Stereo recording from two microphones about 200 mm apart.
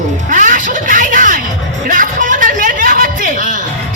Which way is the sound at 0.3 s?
40° right (ahead or behind).